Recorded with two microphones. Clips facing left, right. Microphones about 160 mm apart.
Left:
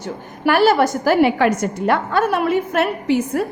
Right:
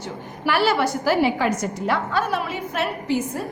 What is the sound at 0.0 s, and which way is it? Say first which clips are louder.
A woman's voice: left 6 dB; 50° left (ahead or behind).